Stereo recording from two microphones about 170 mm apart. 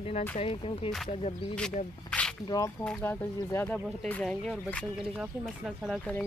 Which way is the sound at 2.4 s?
20° left (ahead or behind).